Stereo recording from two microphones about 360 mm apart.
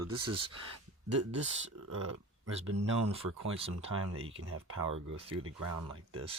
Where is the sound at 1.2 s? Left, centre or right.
Right.